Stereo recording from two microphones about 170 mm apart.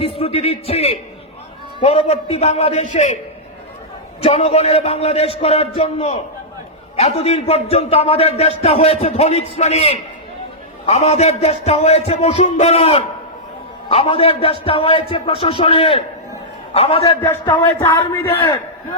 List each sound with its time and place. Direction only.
0.0 s a man's voice: 35° left (ahead or behind)
4.2 s a man's voice: 35° left (ahead or behind)
17.7 s a man's voice: 15° left (ahead or behind)